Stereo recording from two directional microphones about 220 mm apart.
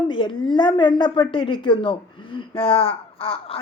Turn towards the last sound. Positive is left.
turn(degrees=25)  # may be behind; listen again after turning